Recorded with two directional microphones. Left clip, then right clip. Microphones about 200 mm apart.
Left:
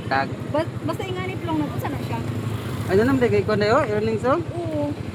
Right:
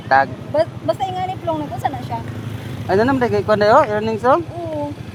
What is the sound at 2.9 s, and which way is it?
Speech, 20° right (ahead or behind).